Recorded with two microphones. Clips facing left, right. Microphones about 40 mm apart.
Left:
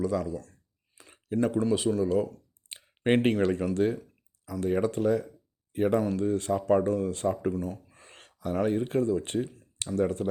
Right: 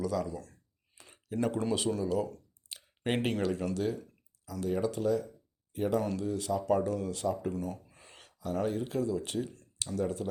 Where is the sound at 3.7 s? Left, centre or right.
Left.